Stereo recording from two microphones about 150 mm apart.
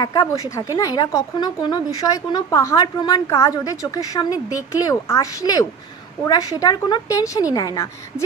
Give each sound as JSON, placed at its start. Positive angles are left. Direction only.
{"t": 0.0, "sound": "a woman's voice", "side_deg": 25}